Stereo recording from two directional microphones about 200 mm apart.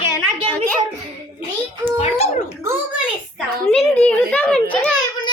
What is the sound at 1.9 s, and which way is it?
Speech, 30° left (ahead or behind).